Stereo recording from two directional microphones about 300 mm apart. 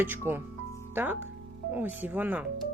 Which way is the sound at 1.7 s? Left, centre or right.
Centre.